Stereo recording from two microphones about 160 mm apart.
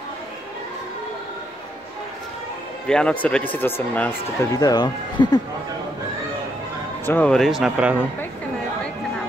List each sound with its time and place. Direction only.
2.9 s speech: 5° left (ahead or behind)
4.5 s speech: 25° left (ahead or behind)
7.1 s speech: 10° left (ahead or behind); by 8.0 s 10° right (ahead or behind)